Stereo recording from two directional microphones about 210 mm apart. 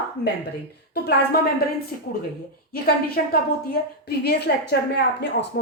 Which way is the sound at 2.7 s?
45° left (ahead or behind).